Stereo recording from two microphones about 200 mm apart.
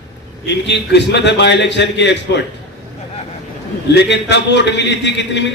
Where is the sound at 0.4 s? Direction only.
60° left (ahead or behind).